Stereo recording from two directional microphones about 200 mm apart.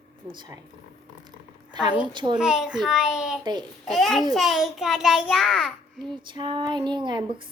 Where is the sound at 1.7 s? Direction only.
20° right (ahead or behind).